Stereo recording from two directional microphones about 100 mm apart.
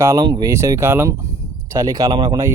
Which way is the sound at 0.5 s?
30° right (ahead or behind).